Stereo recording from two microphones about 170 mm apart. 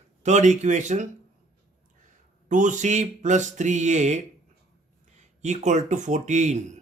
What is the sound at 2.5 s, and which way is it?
Speech, 50° right (ahead or behind).